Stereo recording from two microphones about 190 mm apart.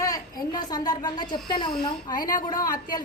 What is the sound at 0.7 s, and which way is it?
Speech, 20° left (ahead or behind).